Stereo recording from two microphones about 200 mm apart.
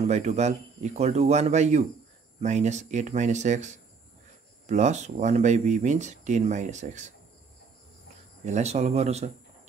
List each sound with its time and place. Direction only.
0.0 s speech: 35° right (ahead or behind)
8.5 s speech: 35° right (ahead or behind)